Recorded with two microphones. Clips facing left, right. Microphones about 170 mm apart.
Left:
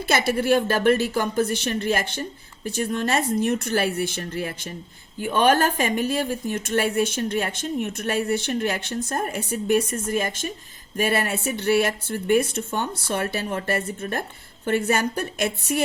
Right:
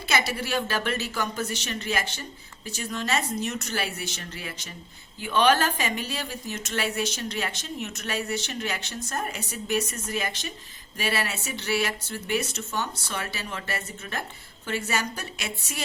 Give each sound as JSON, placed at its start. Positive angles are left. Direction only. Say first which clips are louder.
{"t": 0.0, "sound": "speech", "louder": "left 6 dB", "side_deg": 50}